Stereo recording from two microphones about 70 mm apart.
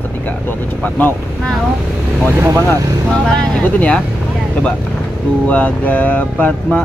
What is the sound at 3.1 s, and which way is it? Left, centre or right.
Female singing, centre.